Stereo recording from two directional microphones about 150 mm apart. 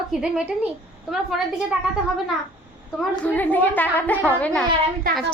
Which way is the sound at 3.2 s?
10° left (ahead or behind).